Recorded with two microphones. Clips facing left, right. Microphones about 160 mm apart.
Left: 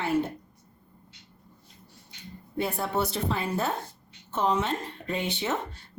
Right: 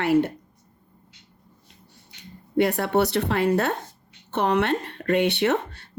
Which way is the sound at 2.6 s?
70° right (ahead or behind).